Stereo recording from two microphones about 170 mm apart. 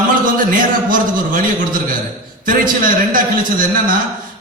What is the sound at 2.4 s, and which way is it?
A man's voice, 55° right (ahead or behind).